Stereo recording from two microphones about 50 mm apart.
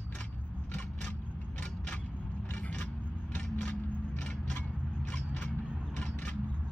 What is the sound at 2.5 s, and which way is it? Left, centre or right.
Scissors, left.